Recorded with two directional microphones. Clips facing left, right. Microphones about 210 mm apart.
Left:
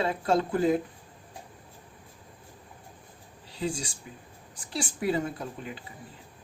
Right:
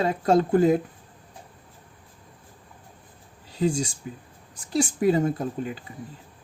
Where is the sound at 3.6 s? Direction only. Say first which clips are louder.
Right 8 dB; 40° right (ahead or behind).